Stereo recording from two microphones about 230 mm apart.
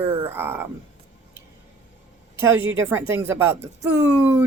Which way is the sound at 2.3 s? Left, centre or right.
Centre.